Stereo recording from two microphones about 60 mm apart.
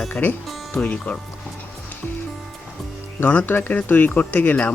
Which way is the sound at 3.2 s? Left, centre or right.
Left.